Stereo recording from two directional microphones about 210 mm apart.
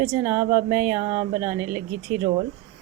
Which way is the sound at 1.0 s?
30° right (ahead or behind).